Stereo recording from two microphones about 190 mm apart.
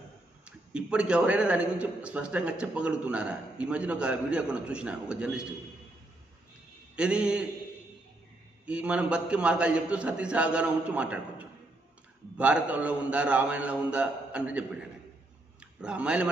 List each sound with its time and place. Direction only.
0.4 s a man's voice: 5° right (ahead or behind)
6.9 s a man's voice: 5° right (ahead or behind)
8.6 s a man's voice: 5° right (ahead or behind)
15.6 s speech: 5° right (ahead or behind)